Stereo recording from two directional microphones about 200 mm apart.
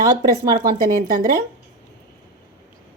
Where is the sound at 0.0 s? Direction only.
45° right (ahead or behind).